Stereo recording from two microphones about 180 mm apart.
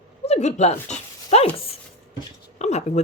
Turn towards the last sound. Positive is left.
turn(degrees=40)  # may be behind; listen again after turning